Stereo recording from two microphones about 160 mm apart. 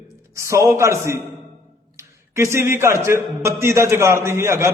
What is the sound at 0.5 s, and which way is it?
A man's voice, 20° right (ahead or behind).